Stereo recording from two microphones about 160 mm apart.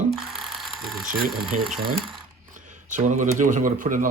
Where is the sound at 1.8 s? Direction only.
70° right (ahead or behind).